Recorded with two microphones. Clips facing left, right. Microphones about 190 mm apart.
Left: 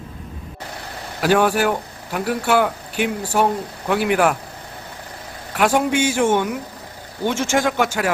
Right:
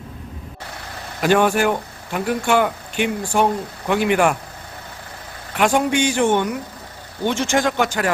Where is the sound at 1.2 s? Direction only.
5° left (ahead or behind).